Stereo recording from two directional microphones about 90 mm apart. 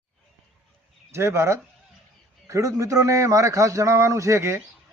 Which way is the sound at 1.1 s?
30° right (ahead or behind).